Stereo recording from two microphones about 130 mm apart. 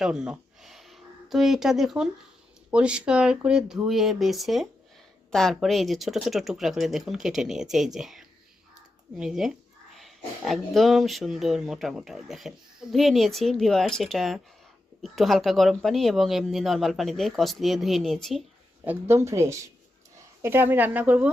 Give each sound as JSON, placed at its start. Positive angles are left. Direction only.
{"t": 0.0, "sound": "a sound", "side_deg": -5}
{"t": 2.6, "sound": "speech", "side_deg": -10}
{"t": 18.9, "sound": "speech", "side_deg": -20}